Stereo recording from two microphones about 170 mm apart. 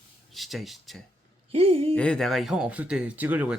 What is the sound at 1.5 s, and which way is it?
Speech, 35° right (ahead or behind).